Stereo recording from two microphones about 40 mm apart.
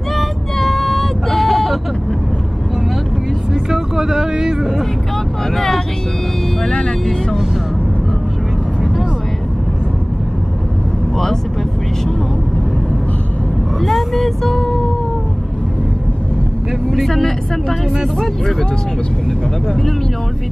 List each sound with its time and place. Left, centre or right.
0.1 s vehicle: centre
3.7 s a sound: centre
6.6 s vehicle: left
13.7 s vehicle: centre
17.1 s speech: centre